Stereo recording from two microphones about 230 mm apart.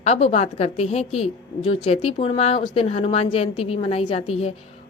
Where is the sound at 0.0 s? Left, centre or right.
Left.